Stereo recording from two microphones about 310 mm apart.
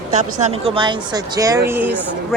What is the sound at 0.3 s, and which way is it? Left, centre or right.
Speech, centre.